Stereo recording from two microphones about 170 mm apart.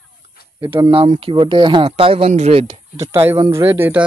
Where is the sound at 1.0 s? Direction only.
40° right (ahead or behind).